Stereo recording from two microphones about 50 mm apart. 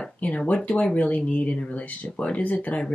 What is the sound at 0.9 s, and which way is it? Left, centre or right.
Speech, left.